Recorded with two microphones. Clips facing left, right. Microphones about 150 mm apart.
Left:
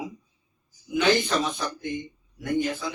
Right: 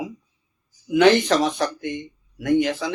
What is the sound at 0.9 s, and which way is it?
Speech, 75° right (ahead or behind).